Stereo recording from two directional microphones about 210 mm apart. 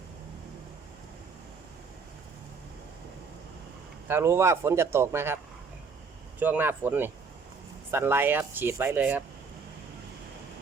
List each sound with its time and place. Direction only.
4.1 s speech: 10° right (ahead or behind)
6.4 s speech: 10° right (ahead or behind)